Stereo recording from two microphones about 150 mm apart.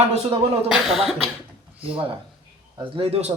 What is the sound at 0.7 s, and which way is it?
Speech, centre (ahead or behind).